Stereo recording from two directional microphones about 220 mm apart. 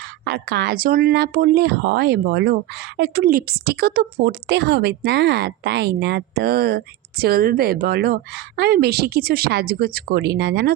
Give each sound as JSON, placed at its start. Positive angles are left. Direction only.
{"t": 0.0, "sound": "speech", "side_deg": -45}